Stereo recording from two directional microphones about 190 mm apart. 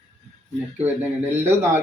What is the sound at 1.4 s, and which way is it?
Speech, 15° right (ahead or behind).